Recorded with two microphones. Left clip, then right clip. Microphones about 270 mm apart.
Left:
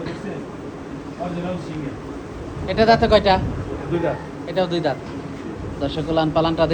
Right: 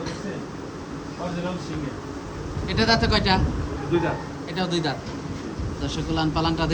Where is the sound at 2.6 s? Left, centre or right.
Centre.